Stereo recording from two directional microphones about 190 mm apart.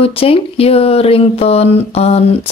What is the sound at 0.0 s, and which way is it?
A woman's voice, 30° left (ahead or behind).